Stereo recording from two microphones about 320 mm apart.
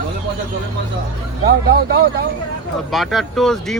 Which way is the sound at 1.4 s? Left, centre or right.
Right.